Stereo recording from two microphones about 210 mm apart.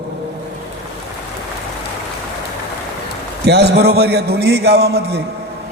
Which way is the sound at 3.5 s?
50° right (ahead or behind).